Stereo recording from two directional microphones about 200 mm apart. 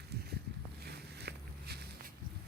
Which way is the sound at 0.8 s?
55° right (ahead or behind).